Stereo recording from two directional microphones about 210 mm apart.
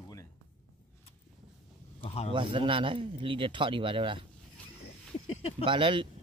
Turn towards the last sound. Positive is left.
turn(degrees=-25)  # may be behind; listen again after turning